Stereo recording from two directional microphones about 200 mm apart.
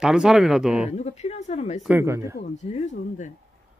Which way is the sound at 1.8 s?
10° right (ahead or behind).